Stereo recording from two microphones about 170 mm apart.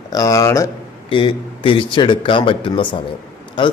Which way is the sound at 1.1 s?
30° left (ahead or behind).